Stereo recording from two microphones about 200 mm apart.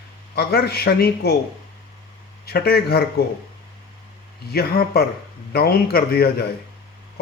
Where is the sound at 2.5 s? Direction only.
50° left (ahead or behind).